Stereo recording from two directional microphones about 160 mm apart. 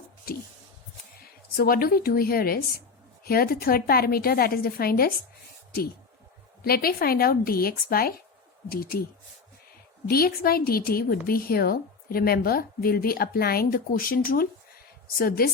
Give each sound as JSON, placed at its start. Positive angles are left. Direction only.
{"t": 0.3, "sound": "a woman's voice", "side_deg": 70}
{"t": 1.5, "sound": "a woman's voice", "side_deg": 65}
{"t": 6.6, "sound": "a woman's voice", "side_deg": 70}
{"t": 10.1, "sound": "a woman's voice", "side_deg": 70}